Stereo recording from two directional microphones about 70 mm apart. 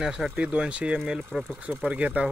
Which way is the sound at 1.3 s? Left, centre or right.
Centre.